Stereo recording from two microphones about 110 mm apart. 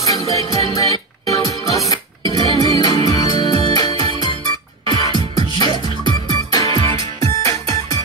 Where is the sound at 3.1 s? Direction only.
40° left (ahead or behind).